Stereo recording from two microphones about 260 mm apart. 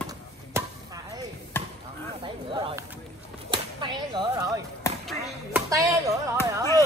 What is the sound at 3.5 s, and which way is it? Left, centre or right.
Whip, centre.